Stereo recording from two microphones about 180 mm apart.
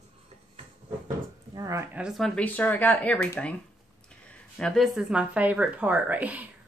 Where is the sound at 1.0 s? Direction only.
20° right (ahead or behind).